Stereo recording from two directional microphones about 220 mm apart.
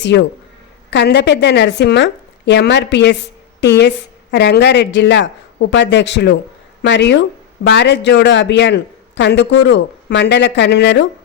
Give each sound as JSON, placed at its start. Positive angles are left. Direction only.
{"t": 0.0, "sound": "a woman's voice", "side_deg": 55}